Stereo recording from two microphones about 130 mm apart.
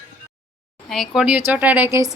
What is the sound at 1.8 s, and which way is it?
Female singing, 25° right (ahead or behind).